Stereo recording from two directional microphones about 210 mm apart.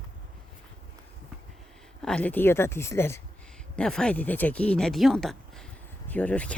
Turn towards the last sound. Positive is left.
turn(degrees=5)  # may be behind; listen again after turning